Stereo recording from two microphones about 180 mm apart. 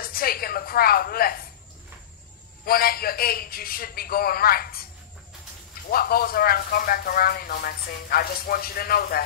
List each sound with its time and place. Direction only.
0.0 s a sound: 55° left (ahead or behind)
2.6 s speech: 55° left (ahead or behind)
5.9 s speech: 55° left (ahead or behind)